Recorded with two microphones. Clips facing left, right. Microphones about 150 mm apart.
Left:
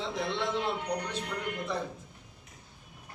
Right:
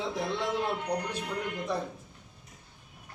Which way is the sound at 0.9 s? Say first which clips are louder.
Right 2 dB; 30° right (ahead or behind).